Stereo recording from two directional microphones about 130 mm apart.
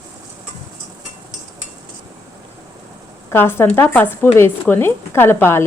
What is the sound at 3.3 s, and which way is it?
A woman's voice, 20° left (ahead or behind).